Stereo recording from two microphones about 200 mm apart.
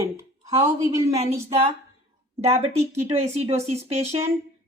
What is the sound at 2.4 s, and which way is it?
A woman's voice, 30° right (ahead or behind).